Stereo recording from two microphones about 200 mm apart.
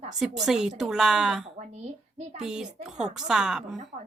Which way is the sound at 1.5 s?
35° right (ahead or behind).